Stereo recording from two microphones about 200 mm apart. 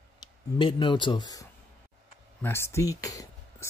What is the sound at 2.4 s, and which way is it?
Speech, 10° left (ahead or behind).